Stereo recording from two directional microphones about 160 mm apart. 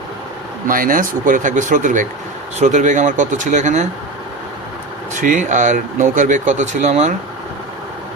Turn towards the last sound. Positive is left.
turn(degrees=-45)  # may be behind; listen again after turning